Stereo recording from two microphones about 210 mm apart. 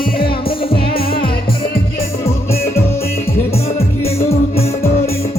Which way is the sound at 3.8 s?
30° left (ahead or behind).